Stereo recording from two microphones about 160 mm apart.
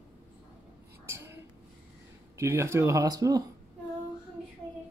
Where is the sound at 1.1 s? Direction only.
15° right (ahead or behind).